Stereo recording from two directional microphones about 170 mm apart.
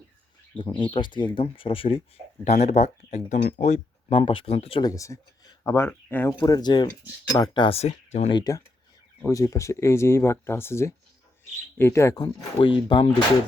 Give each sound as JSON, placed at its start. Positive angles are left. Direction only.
{"t": 0.5, "sound": "speech", "side_deg": 30}
{"t": 4.8, "sound": "speech", "side_deg": 20}
{"t": 8.3, "sound": "speech", "side_deg": 25}
{"t": 12.1, "sound": "speech", "side_deg": 25}